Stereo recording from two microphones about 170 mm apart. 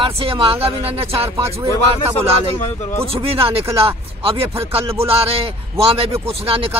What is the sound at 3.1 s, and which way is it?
Speech, 35° right (ahead or behind).